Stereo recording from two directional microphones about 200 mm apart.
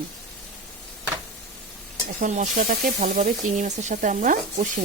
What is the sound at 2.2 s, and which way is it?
Speech, 40° right (ahead or behind).